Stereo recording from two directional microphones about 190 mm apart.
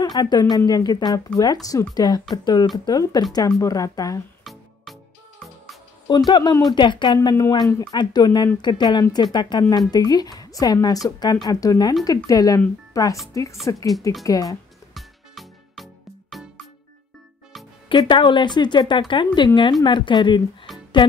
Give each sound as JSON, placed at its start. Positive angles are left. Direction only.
{"t": 0.0, "sound": "a woman's voice", "side_deg": 20}
{"t": 6.0, "sound": "a woman's voice", "side_deg": 25}
{"t": 15.0, "sound": "music", "side_deg": 0}
{"t": 17.8, "sound": "speech", "side_deg": 25}